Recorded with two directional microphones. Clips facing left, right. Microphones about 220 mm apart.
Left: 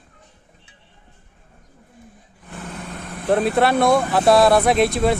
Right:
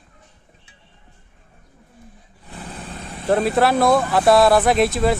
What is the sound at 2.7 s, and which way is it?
Vehicle, 30° right (ahead or behind).